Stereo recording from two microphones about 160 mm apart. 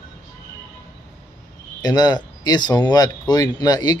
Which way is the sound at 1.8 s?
25° left (ahead or behind).